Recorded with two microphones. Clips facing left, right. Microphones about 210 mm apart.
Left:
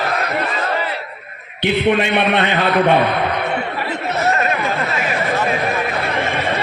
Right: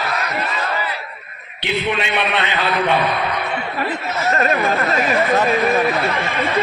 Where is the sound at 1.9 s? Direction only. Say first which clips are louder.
Left 5 dB; 50° left (ahead or behind).